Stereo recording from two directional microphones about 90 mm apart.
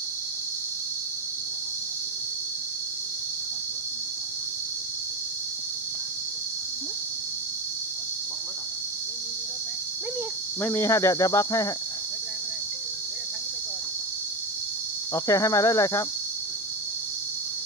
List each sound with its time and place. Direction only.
10.7 s speech: 30° left (ahead or behind)
15.1 s speech: 35° left (ahead or behind)